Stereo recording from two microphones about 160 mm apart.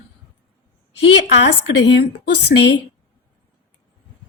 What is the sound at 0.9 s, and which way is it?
A woman's voice, 90° left.